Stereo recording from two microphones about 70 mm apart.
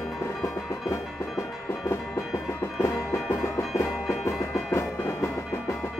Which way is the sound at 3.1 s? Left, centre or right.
Left.